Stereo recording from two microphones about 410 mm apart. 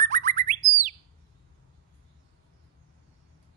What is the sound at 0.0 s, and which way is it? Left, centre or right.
Bird, centre.